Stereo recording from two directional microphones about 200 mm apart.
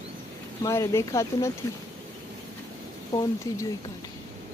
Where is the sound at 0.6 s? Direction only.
15° left (ahead or behind).